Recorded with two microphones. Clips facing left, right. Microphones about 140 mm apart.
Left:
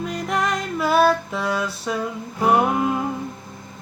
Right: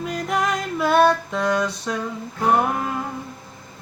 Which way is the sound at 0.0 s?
Centre (ahead or behind).